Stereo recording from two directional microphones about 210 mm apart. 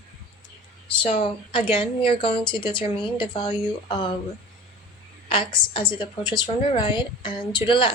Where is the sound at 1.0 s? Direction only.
30° left (ahead or behind).